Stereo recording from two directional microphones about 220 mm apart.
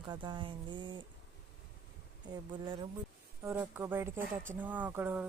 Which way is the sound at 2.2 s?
20° right (ahead or behind).